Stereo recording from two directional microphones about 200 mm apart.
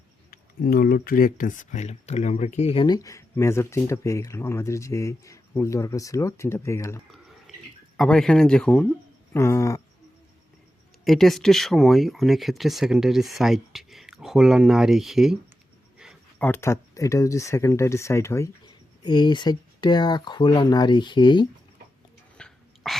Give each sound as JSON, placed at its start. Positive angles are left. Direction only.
{"t": 0.3, "sound": "speech", "side_deg": 45}
{"t": 7.1, "sound": "a sound", "side_deg": 0}
{"t": 7.9, "sound": "speech", "side_deg": 0}
{"t": 9.3, "sound": "speech", "side_deg": 15}
{"t": 11.0, "sound": "speech", "side_deg": 0}
{"t": 16.4, "sound": "speech", "side_deg": 10}
{"t": 22.4, "sound": "a sound", "side_deg": 0}